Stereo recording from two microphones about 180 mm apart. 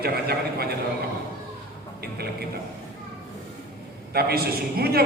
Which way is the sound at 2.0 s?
60° right (ahead or behind).